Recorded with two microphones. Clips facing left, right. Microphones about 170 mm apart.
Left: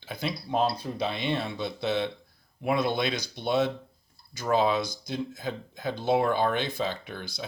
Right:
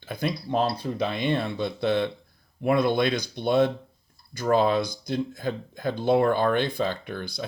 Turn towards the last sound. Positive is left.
turn(degrees=-50)  # may be behind; listen again after turning